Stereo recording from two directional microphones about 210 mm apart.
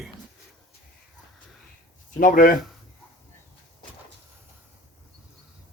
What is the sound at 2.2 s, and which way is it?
Speech, 40° left (ahead or behind).